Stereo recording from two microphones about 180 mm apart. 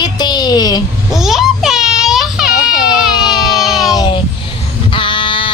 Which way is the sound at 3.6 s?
Centre (ahead or behind).